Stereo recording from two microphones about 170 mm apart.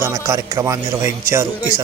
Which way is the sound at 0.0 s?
15° right (ahead or behind).